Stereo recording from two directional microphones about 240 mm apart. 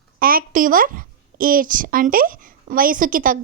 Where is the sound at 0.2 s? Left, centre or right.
Right.